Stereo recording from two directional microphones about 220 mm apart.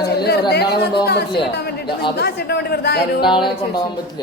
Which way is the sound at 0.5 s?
45° left (ahead or behind).